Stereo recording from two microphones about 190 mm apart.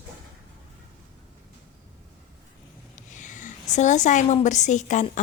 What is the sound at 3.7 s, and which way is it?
A woman's voice, 40° left (ahead or behind).